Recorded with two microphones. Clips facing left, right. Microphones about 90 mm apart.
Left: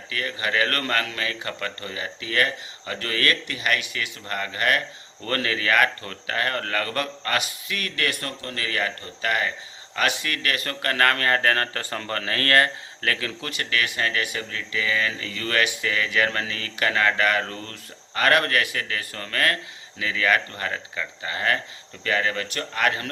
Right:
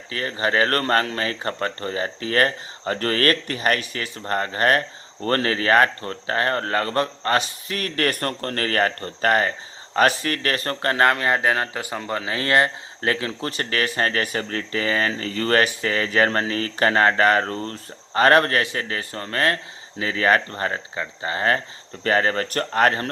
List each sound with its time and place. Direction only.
0.1 s speech: 35° right (ahead or behind)